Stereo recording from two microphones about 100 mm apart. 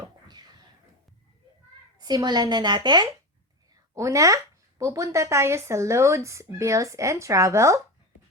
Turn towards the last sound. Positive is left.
turn(degrees=-30)  # may be behind; listen again after turning